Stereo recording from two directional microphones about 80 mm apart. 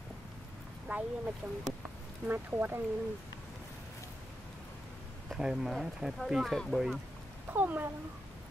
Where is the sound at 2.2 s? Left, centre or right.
Right.